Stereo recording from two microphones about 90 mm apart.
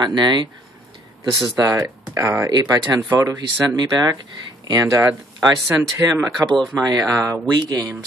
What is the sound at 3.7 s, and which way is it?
Speech, 50° right (ahead or behind).